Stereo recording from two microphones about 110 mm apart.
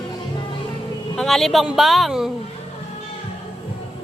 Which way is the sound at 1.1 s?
Centre (ahead or behind).